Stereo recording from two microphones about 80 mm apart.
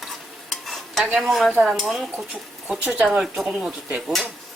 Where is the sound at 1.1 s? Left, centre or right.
Centre.